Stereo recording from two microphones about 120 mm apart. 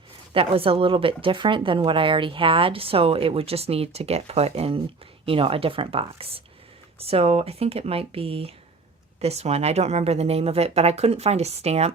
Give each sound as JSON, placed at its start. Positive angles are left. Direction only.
{"t": 0.3, "sound": "speech", "side_deg": -50}